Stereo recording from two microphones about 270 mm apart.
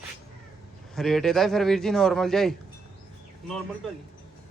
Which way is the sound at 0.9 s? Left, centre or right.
Centre.